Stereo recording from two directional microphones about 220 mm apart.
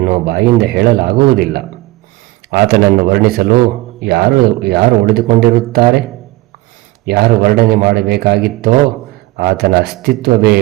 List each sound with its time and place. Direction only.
0.0 s a man's voice: 45° right (ahead or behind)
7.0 s a man's voice: 45° right (ahead or behind)